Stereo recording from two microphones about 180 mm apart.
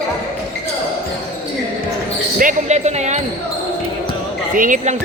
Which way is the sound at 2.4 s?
45° right (ahead or behind).